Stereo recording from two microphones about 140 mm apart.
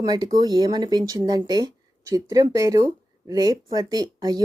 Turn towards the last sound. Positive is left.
turn(degrees=-30)  # may be behind; listen again after turning